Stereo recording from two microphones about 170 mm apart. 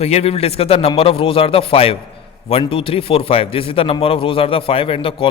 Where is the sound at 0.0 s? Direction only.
40° left (ahead or behind).